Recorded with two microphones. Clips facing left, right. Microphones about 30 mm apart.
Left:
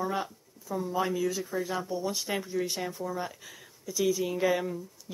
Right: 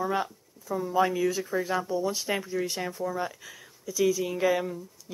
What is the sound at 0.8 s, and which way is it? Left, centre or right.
Speech, right.